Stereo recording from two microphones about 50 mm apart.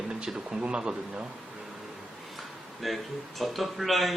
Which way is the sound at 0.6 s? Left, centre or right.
Centre.